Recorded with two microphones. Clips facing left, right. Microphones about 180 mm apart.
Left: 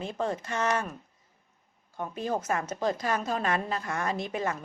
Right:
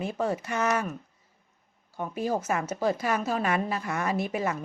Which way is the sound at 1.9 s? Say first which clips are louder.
Right 2 dB; 10° right (ahead or behind).